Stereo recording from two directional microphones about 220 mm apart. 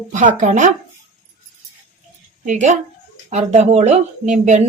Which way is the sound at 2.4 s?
35° right (ahead or behind).